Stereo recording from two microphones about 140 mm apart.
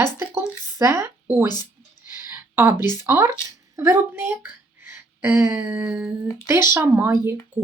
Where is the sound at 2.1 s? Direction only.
15° right (ahead or behind).